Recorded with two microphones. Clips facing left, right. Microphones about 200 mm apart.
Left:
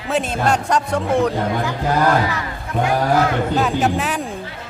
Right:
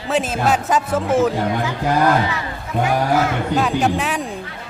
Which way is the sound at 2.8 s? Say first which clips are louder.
Left 1 dB; centre (ahead or behind).